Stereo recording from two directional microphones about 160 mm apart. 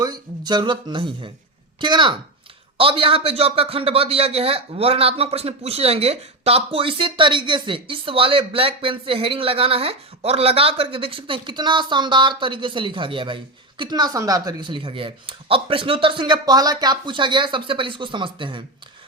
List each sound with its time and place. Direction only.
0.0 s a man's voice: 25° right (ahead or behind)